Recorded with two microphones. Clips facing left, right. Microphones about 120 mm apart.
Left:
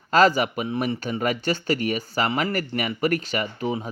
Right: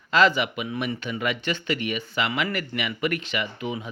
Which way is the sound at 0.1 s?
40° left (ahead or behind).